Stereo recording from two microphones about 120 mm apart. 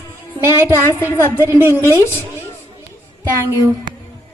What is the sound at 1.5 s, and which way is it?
Speech, 15° right (ahead or behind).